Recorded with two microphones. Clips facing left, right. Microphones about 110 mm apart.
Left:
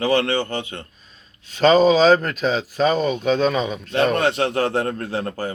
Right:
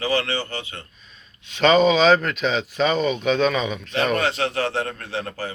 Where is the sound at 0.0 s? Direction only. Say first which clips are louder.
Left 4 dB; 55° left (ahead or behind).